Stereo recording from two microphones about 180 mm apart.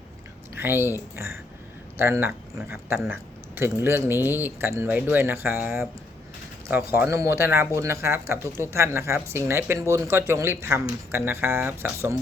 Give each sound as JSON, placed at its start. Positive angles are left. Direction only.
{"t": 0.5, "sound": "speech", "side_deg": -10}